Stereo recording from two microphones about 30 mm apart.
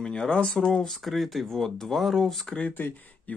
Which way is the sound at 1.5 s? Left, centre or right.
Centre.